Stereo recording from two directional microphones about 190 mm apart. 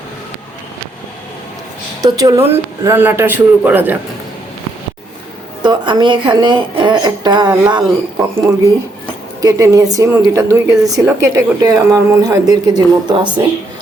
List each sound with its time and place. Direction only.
2.0 s speech: 20° right (ahead or behind)
5.6 s speech: 25° right (ahead or behind)
9.4 s speech: 20° right (ahead or behind)